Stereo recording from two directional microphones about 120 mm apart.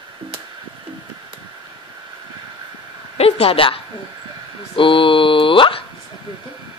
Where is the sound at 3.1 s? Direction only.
55° left (ahead or behind).